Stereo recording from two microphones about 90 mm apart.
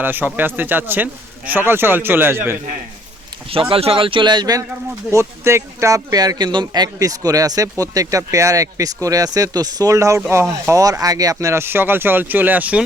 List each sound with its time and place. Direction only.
0.0 s speech: 20° right (ahead or behind)
3.5 s a man's voice: 90° right; by 4.6 s 50° right (ahead or behind)
5.1 s speech: 30° right (ahead or behind)